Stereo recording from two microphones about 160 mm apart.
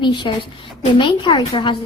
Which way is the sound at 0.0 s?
30° left (ahead or behind).